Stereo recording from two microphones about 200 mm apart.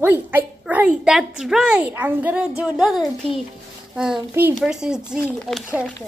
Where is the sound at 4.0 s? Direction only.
5° right (ahead or behind).